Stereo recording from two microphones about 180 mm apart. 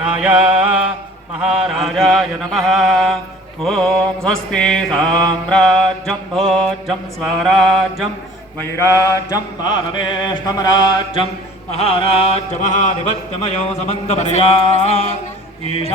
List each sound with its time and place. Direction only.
0.0 s mantra: 10° right (ahead or behind)
8.5 s mantra: 15° left (ahead or behind)
11.7 s a sound: 35° left (ahead or behind)